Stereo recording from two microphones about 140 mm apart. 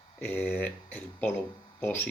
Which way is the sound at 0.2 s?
10° left (ahead or behind).